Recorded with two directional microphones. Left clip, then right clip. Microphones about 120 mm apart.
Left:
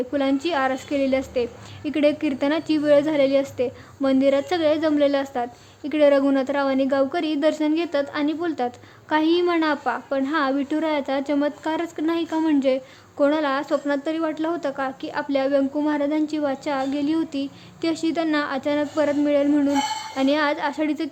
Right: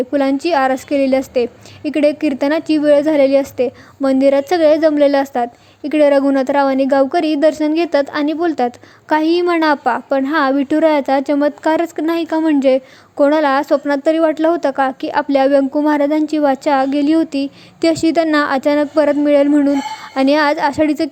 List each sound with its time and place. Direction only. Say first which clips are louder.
0.1 s a woman's voice: right 8 dB; 40° right (ahead or behind)